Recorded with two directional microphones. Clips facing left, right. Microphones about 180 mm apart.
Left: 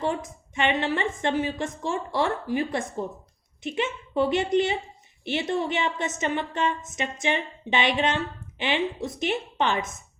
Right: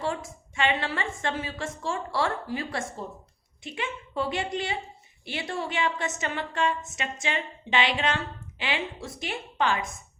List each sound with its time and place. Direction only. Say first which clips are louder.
0.0 s a woman's voice: left 3 dB; 20° left (ahead or behind)